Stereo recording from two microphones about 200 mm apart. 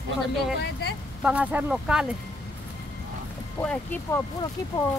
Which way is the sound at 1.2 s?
5° right (ahead or behind).